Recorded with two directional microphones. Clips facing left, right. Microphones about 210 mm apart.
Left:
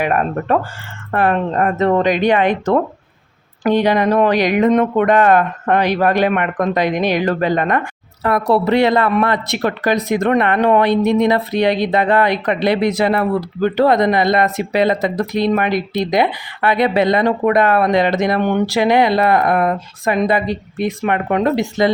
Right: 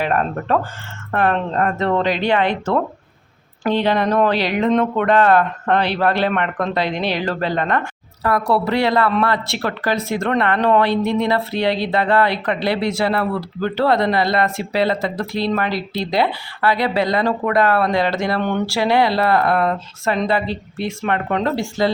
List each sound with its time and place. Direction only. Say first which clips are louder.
0.0 s speech: left 2 dB; 10° left (ahead or behind)